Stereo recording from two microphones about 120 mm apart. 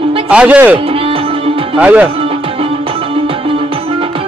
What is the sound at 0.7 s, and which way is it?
Music, 50° right (ahead or behind).